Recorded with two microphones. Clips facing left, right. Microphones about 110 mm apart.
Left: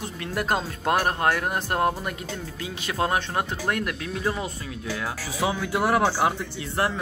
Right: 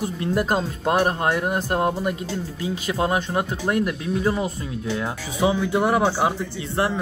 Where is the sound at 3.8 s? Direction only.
5° right (ahead or behind).